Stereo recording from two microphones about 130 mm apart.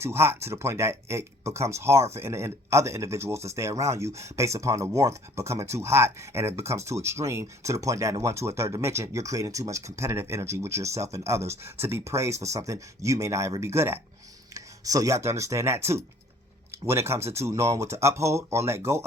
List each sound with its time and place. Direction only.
0.0 s speech: 20° right (ahead or behind)